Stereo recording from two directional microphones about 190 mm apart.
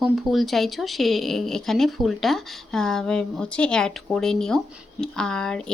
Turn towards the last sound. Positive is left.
turn(degrees=5)  # may be behind; listen again after turning